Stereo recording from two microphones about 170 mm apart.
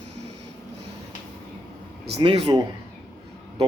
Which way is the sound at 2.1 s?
30° right (ahead or behind).